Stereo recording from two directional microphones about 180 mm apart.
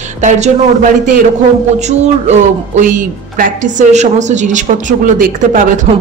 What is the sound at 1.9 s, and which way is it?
A woman's voice, 40° right (ahead or behind).